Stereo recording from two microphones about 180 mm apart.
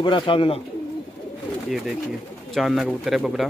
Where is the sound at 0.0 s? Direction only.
30° left (ahead or behind).